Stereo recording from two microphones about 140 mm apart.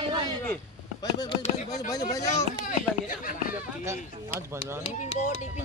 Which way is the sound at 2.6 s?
75° left (ahead or behind).